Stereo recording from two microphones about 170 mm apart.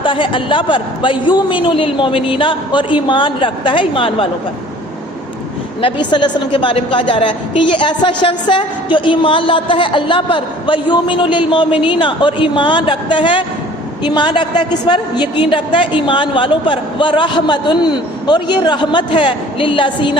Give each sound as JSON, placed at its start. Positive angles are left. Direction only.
{"t": 0.0, "sound": "a woman's voice", "side_deg": 30}
{"t": 5.8, "sound": "a woman's voice", "side_deg": 25}